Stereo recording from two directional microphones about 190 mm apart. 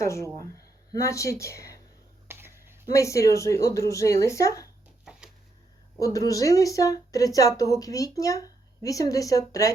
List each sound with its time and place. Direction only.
0.0 s speech: 15° left (ahead or behind)
2.2 s a sound: 10° right (ahead or behind)
2.8 s speech: 15° left (ahead or behind)
6.0 s speech: 20° left (ahead or behind)